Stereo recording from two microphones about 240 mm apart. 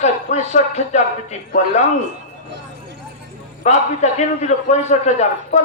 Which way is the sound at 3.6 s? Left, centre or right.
Left.